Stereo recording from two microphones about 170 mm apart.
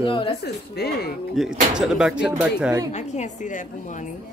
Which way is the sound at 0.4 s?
70° left (ahead or behind).